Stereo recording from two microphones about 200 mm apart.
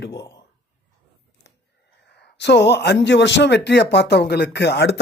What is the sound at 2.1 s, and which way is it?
Speech, 60° left (ahead or behind).